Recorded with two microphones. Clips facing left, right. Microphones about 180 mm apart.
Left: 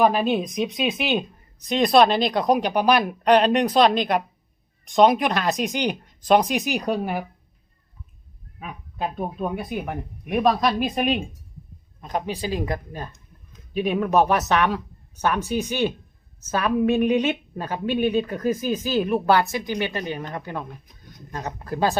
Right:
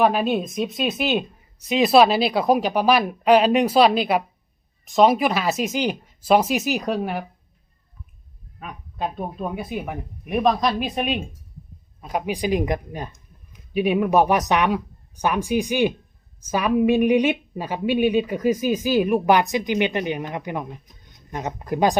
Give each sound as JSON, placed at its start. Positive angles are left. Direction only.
{"t": 0.0, "sound": "speech", "side_deg": 0}
{"t": 8.5, "sound": "a woman's voice", "side_deg": 5}